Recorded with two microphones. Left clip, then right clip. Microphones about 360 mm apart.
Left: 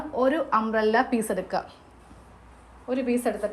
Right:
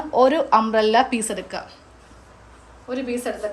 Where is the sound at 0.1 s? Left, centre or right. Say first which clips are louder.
Right 7 dB; centre.